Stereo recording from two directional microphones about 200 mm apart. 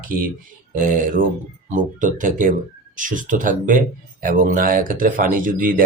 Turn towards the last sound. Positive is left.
turn(degrees=-45)  # may be behind; listen again after turning